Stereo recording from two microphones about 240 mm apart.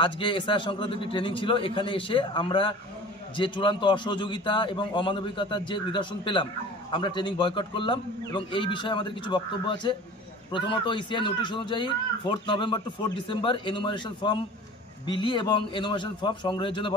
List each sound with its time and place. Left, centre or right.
0.0 s a man's voice: left